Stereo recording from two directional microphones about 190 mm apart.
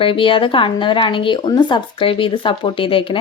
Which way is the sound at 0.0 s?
25° left (ahead or behind).